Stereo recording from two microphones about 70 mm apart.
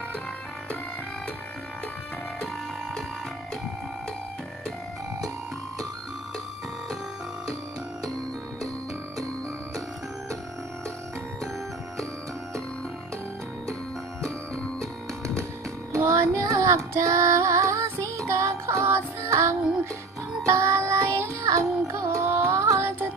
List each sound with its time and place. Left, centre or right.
14.8 s music: right
15.9 s female singing: right
18.0 s music: right
22.8 s music: right